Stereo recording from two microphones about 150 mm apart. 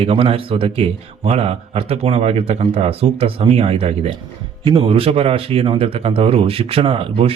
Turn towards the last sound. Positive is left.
turn(degrees=-40)  # may be behind; listen again after turning